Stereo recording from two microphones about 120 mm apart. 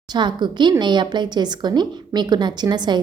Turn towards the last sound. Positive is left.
turn(degrees=-35)  # may be behind; listen again after turning